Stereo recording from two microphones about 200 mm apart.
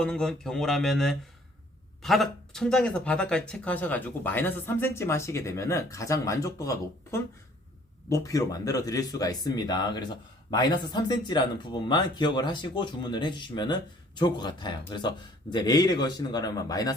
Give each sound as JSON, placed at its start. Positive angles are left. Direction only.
{"t": 0.0, "sound": "speech", "side_deg": 5}